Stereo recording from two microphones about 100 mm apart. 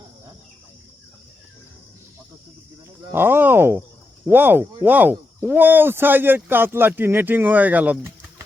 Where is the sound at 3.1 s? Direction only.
20° right (ahead or behind).